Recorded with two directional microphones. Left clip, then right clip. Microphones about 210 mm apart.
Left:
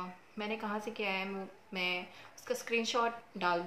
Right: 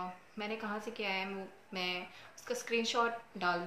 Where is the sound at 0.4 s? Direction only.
10° left (ahead or behind).